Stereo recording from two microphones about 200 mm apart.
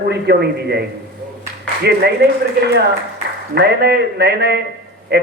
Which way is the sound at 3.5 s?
55° right (ahead or behind).